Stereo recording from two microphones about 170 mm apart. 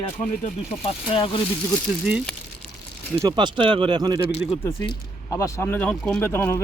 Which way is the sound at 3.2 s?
25° right (ahead or behind).